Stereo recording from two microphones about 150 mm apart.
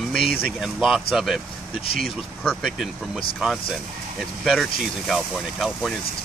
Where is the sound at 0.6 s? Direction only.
Centre (ahead or behind).